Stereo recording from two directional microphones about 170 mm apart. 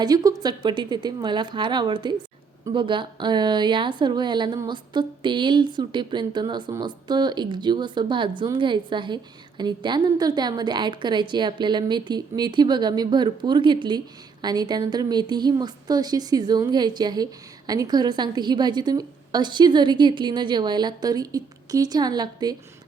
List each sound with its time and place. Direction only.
0.0 s a woman's voice: 20° right (ahead or behind)